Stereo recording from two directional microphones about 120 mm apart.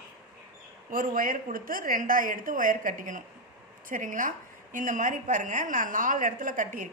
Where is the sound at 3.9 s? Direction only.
90° right.